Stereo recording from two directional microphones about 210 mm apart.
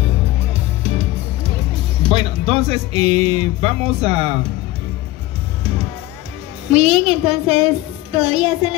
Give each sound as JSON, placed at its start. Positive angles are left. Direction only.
{"t": 2.0, "sound": "speech", "side_deg": -30}
{"t": 6.7, "sound": "speech", "side_deg": -30}